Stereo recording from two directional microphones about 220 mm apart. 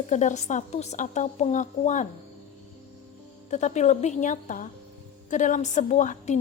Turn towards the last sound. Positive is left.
turn(degrees=35)  # may be behind; listen again after turning